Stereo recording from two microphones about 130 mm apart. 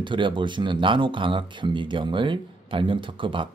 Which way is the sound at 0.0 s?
40° right (ahead or behind).